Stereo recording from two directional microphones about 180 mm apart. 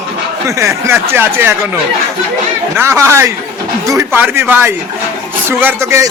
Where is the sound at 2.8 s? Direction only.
15° right (ahead or behind).